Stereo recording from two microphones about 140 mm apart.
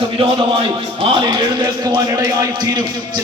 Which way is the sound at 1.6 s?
25° right (ahead or behind).